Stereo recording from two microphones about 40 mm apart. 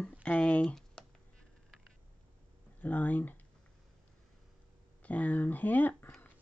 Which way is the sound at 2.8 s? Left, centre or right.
Left.